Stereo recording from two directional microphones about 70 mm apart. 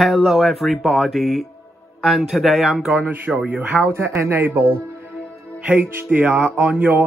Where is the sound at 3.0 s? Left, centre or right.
Right.